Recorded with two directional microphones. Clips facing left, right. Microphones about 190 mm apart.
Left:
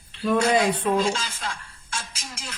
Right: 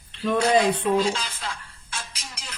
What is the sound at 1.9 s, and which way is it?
Music, 45° left (ahead or behind).